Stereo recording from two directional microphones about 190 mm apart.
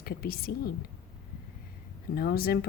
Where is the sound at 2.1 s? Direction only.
55° left (ahead or behind).